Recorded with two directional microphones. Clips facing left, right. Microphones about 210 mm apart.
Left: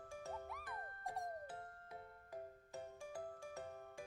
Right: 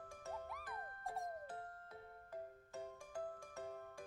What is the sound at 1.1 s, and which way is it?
Music, centre (ahead or behind).